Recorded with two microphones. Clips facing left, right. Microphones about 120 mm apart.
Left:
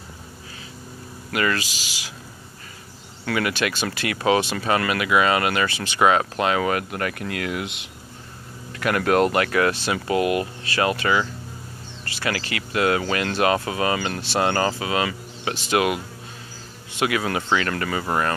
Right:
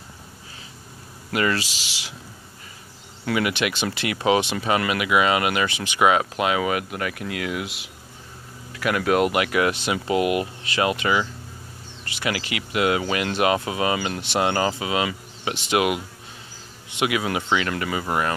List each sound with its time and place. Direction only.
1.3 s speech: 25° right (ahead or behind)
3.3 s speech: 20° right (ahead or behind)